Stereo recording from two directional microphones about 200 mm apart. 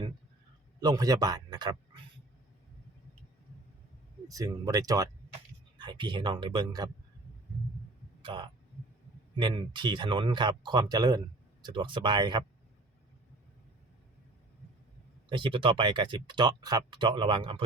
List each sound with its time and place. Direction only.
0.8 s speech: 20° right (ahead or behind)
4.3 s speech: 15° right (ahead or behind)
8.2 s speech: 25° right (ahead or behind)
15.3 s speech: 25° right (ahead or behind)